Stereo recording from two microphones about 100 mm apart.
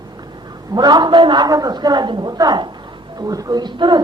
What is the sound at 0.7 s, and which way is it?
A man's voice, 45° right (ahead or behind).